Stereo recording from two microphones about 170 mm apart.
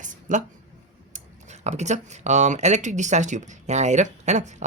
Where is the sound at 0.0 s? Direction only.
45° right (ahead or behind).